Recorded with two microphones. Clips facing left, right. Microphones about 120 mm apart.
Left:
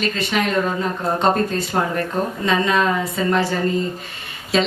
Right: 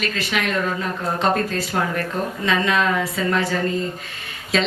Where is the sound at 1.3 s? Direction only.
30° left (ahead or behind).